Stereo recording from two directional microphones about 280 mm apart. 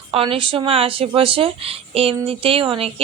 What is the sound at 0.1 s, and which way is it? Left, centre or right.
A woman's voice, centre.